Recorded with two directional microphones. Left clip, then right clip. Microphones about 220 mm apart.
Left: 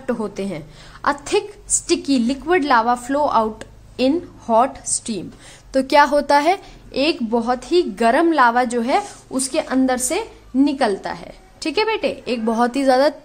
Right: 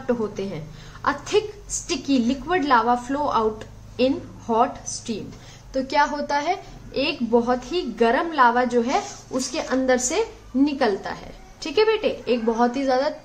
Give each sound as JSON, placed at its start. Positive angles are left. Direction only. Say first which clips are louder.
{"t": 0.0, "sound": "a woman's voice", "louder": "left 1 dB", "side_deg": 50}